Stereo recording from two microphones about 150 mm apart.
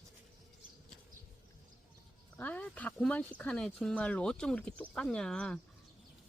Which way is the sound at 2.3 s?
10° left (ahead or behind).